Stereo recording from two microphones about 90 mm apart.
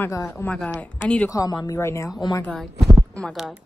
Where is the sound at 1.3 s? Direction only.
40° left (ahead or behind).